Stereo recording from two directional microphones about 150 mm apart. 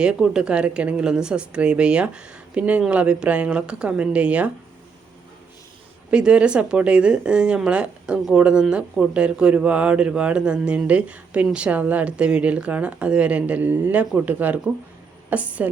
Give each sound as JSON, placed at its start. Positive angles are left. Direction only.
{"t": 0.0, "sound": "a woman's voice", "side_deg": -5}
{"t": 6.1, "sound": "a woman's voice", "side_deg": -5}